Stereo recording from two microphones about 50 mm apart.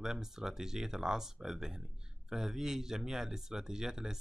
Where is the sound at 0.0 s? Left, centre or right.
Centre.